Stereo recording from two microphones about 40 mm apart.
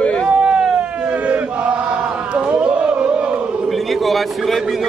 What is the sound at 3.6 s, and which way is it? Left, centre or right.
A man's voice, centre.